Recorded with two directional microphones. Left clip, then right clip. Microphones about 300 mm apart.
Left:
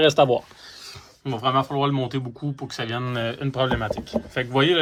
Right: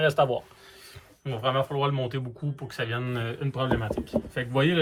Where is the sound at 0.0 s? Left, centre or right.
Left.